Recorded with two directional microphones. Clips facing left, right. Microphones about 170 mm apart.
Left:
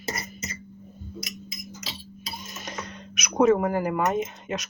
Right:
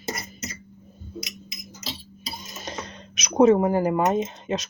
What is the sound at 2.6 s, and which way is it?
Speech, 30° right (ahead or behind).